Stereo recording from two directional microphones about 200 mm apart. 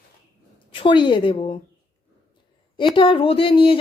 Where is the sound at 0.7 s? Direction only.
25° left (ahead or behind).